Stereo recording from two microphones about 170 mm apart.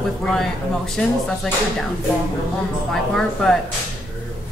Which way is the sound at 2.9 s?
Centre (ahead or behind).